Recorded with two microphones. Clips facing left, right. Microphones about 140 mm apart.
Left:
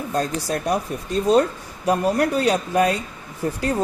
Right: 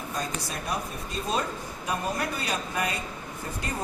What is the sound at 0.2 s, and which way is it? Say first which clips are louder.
Speech: left 10 dB; 80° left.